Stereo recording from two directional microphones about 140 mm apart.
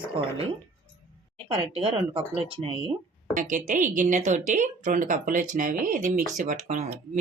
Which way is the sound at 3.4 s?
70° right (ahead or behind).